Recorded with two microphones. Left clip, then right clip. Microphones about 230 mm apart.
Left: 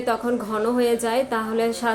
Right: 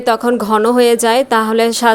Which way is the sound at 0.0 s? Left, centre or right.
Right.